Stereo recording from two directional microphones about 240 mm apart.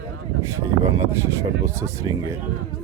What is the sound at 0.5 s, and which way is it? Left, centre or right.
Speech, centre.